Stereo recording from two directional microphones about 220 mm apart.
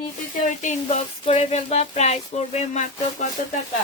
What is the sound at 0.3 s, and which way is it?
Speech, 35° left (ahead or behind).